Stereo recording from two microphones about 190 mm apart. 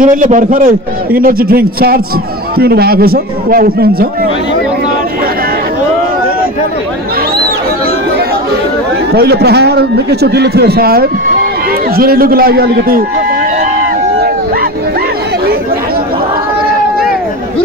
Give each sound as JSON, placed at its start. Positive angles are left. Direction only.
{"t": 0.0, "sound": "a man's voice", "side_deg": -40}
{"t": 9.1, "sound": "a man's voice", "side_deg": -60}